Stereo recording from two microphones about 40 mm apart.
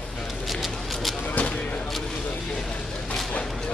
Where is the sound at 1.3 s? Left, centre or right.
Left.